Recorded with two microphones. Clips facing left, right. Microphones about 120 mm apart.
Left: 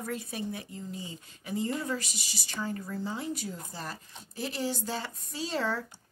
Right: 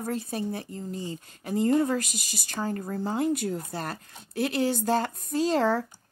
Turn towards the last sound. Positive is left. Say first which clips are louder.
# right 8 dB
turn(degrees=-45)  # may be behind; listen again after turning